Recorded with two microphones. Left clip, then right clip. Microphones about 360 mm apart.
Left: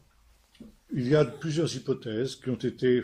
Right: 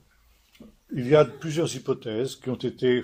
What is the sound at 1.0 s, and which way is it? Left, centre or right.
Speech, centre.